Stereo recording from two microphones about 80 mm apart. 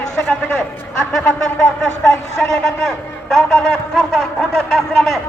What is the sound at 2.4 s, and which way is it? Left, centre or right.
A man's voice, centre.